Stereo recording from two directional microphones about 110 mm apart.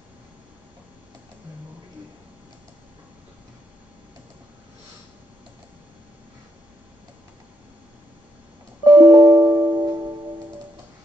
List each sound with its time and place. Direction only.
8.8 s music: 40° right (ahead or behind)